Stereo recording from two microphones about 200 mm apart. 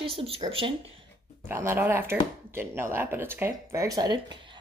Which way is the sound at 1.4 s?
10° right (ahead or behind).